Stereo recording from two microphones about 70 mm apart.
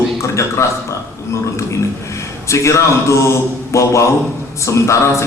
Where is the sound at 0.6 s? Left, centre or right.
Left.